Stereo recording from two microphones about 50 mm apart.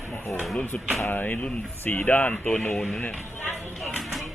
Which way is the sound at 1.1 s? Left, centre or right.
Left.